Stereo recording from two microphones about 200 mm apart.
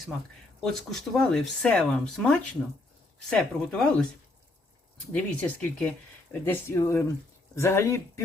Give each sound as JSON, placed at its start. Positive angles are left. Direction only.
{"t": 0.6, "sound": "speech", "side_deg": 0}
{"t": 5.1, "sound": "speech", "side_deg": 5}